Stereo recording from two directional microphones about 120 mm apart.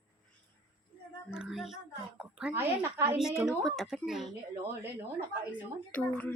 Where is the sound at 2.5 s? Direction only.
20° right (ahead or behind).